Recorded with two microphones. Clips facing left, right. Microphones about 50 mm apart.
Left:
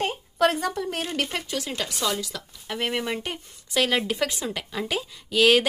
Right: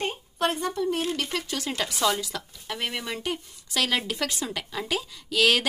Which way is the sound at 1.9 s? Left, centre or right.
Centre.